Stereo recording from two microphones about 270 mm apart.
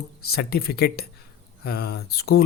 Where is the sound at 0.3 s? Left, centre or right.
Left.